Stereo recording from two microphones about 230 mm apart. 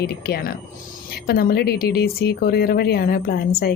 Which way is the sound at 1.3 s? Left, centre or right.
Left.